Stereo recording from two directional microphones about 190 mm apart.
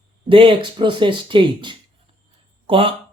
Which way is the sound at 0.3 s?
30° right (ahead or behind).